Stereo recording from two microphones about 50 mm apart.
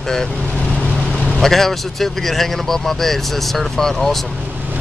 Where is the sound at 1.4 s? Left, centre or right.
Centre.